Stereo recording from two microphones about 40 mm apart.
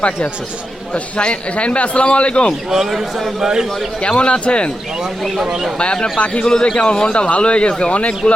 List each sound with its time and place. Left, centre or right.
0.9 s a man's voice: left
2.6 s a man's voice: centre
4.0 s a man's voice: left
5.8 s a man's voice: left
6.5 s a man's voice: centre